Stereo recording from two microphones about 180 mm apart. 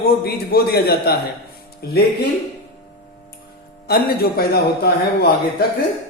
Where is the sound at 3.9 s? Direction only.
60° left (ahead or behind).